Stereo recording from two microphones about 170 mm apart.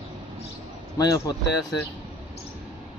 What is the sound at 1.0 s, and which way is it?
Speech, 25° left (ahead or behind).